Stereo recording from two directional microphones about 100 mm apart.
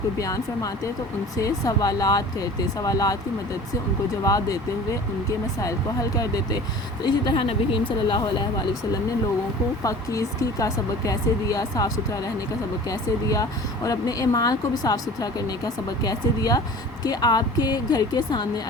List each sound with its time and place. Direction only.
0.2 s speech: 35° left (ahead or behind)
4.2 s speech: 35° left (ahead or behind)
7.3 s speech: 60° left (ahead or behind)
9.8 s speech: 30° left (ahead or behind)